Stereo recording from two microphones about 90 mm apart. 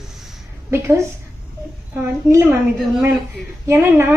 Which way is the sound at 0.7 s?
30° right (ahead or behind).